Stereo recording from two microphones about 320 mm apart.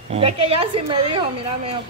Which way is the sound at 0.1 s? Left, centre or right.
Centre.